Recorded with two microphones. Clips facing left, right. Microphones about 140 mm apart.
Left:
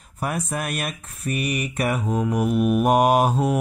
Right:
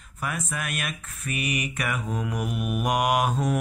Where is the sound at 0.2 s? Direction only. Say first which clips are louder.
Left 5 dB; 40° left (ahead or behind).